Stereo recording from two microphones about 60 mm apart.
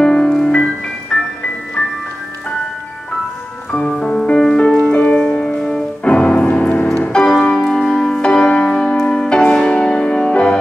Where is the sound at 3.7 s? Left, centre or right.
Centre.